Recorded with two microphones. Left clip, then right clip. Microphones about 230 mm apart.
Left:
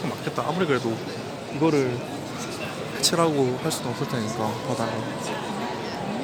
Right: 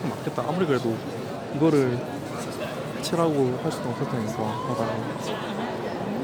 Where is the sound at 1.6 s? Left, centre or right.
Centre.